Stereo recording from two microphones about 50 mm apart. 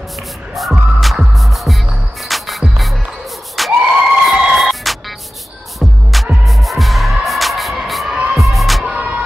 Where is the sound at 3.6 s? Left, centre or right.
Centre.